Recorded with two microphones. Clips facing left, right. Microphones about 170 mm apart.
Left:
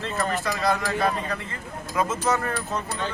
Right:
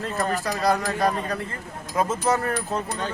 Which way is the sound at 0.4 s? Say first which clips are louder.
Right 2 dB; 35° right (ahead or behind).